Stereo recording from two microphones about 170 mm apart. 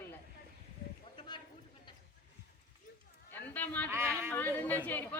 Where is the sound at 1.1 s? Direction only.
25° left (ahead or behind).